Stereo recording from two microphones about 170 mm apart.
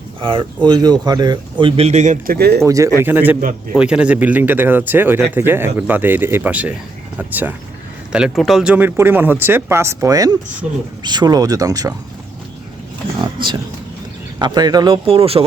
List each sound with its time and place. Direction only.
0.2 s speech: 30° right (ahead or behind)
2.2 s speech: 65° right (ahead or behind)
2.6 s speech: 20° right (ahead or behind)
13.2 s speech: 25° right (ahead or behind)
15.0 s speech: 35° right (ahead or behind)